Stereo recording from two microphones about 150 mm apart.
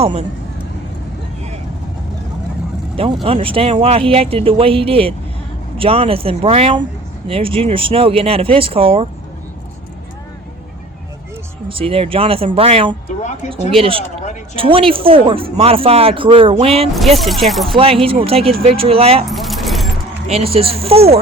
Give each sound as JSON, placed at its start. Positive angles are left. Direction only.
{"t": 0.0, "sound": "speech", "side_deg": -45}
{"t": 2.9, "sound": "speech", "side_deg": -40}
{"t": 11.7, "sound": "speech", "side_deg": -40}
{"t": 17.2, "sound": "speech", "side_deg": 0}
{"t": 17.7, "sound": "speech", "side_deg": -40}
{"t": 19.3, "sound": "keys jangling", "side_deg": 0}
{"t": 20.2, "sound": "speech", "side_deg": -40}